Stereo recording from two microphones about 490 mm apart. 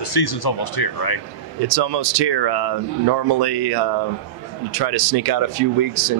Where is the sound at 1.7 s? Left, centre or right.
Right.